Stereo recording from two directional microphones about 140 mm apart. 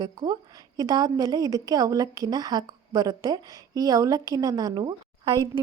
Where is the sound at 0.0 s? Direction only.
25° right (ahead or behind).